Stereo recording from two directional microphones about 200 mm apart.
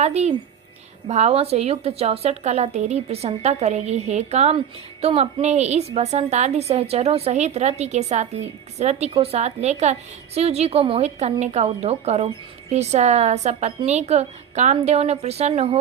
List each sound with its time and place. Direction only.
0.0 s a woman's voice: 30° right (ahead or behind)